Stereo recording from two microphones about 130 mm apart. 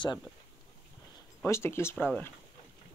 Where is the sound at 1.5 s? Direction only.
20° left (ahead or behind).